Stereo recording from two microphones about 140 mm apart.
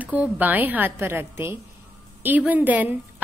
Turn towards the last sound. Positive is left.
turn(degrees=-10)  # may be behind; listen again after turning